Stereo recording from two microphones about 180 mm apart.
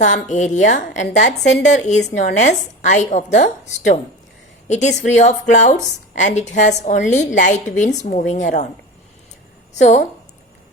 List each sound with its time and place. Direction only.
0.0 s a woman's voice: 40° left (ahead or behind)
9.7 s a woman's voice: 40° left (ahead or behind)